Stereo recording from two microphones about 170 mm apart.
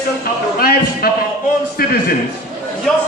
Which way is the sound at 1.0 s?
65° left (ahead or behind).